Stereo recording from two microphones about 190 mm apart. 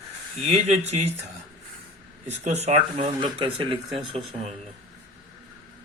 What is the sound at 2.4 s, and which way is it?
Speech, 35° right (ahead or behind).